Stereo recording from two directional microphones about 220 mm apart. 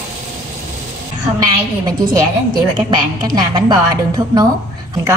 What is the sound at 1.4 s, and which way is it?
A woman's voice, 15° right (ahead or behind).